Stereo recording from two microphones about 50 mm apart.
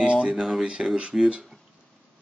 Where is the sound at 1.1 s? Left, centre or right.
Centre.